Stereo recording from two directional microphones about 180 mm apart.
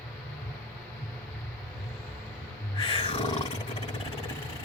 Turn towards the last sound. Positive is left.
turn(degrees=30)  # may be behind; listen again after turning